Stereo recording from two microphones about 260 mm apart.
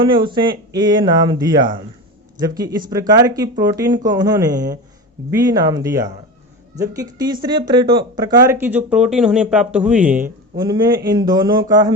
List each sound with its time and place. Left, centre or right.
0.0 s speech: centre